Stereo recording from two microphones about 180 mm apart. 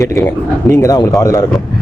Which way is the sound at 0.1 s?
15° left (ahead or behind).